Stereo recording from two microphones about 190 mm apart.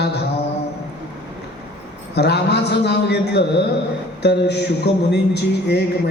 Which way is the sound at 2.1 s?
60° left (ahead or behind).